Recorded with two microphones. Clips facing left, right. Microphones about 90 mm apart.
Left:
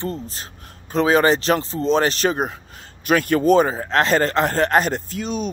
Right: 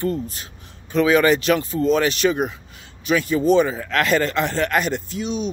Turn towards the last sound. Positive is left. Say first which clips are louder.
# even
turn(degrees=45)  # may be behind; listen again after turning